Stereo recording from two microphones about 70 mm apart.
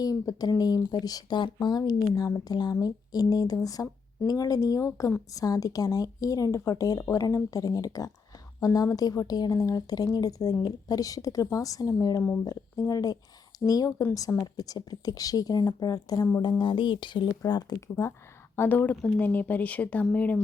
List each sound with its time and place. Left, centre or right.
0.0 s speech: left
2.4 s speech: left
5.3 s speech: left
16.4 s speech: left
18.5 s speech: left